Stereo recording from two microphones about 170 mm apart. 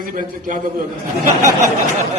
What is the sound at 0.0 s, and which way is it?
Speech, 50° right (ahead or behind).